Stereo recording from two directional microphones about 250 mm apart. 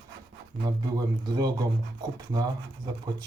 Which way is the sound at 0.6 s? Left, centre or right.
Centre.